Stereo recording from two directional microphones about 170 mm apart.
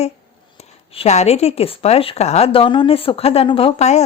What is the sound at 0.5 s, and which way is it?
Speech, 35° left (ahead or behind).